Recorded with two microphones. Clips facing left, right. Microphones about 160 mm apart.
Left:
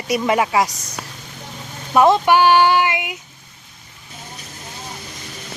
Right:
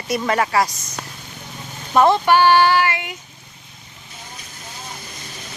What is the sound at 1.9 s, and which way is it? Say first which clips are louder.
A woman's voice: left 1 dB; 15° left (ahead or behind).